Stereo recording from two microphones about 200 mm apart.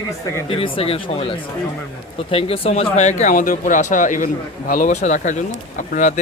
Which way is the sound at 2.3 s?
30° left (ahead or behind).